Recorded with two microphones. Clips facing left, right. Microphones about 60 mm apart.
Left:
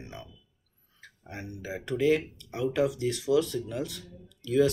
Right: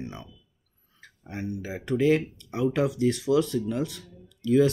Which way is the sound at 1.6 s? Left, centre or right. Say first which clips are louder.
Right 2 dB; right.